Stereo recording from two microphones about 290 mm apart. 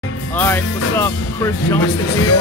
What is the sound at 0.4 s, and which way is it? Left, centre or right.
Speech, centre.